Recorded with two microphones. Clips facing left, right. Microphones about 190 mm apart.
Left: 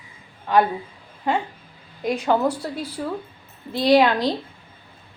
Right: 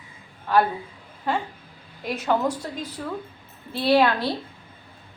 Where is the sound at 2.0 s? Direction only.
10° left (ahead or behind).